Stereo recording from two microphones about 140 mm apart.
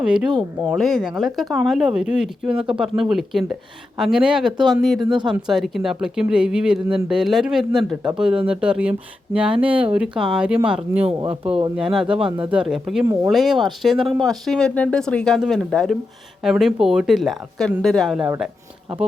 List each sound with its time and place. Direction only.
0.0 s speech: 5° right (ahead or behind)
5.0 s speech: 35° right (ahead or behind)
5.5 s speech: centre (ahead or behind)
11.2 s speech: 40° right (ahead or behind)
11.8 s speech: 5° right (ahead or behind)